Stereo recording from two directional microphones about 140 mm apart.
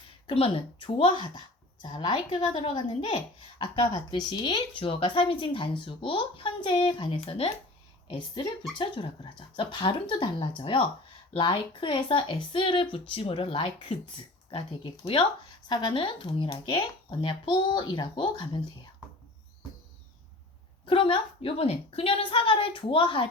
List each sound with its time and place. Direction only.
0.3 s a woman's voice: 40° left (ahead or behind)
8.8 s a woman's voice: 35° left (ahead or behind)
15.7 s a woman's voice: 35° left (ahead or behind)
20.8 s a woman's voice: 35° left (ahead or behind)